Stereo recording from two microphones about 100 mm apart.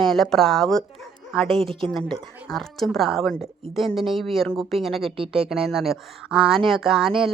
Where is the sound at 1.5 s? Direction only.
60° right (ahead or behind).